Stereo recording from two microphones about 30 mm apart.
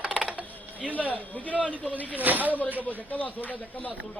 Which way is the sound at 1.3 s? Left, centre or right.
Left.